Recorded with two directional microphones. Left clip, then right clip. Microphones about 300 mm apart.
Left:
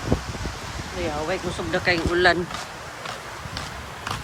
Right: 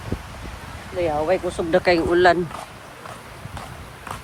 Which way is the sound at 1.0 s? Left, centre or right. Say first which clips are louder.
Right 6 dB; centre.